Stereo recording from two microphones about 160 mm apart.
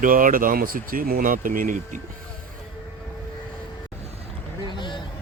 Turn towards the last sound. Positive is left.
turn(degrees=30)  # may be behind; listen again after turning